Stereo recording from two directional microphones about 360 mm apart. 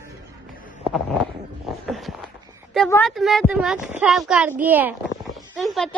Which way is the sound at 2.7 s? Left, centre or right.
Centre.